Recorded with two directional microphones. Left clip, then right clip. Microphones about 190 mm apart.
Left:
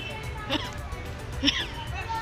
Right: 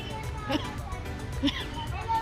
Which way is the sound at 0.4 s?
20° right (ahead or behind).